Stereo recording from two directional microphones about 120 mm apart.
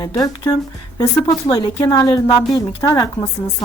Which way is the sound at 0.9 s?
35° left (ahead or behind).